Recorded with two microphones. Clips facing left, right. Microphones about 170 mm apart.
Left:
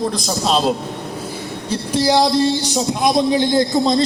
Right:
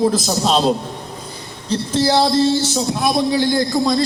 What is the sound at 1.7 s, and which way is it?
Speech, 10° left (ahead or behind).